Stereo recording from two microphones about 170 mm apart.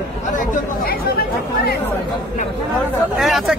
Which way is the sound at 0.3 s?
55° left (ahead or behind).